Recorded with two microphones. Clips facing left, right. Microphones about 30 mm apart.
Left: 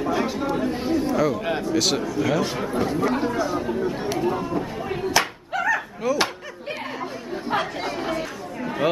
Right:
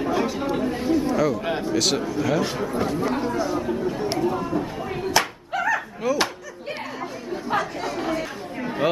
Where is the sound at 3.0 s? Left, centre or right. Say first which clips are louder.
Left 1 dB; centre.